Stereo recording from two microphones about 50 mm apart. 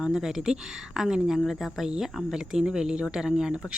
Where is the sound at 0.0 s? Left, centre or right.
Centre.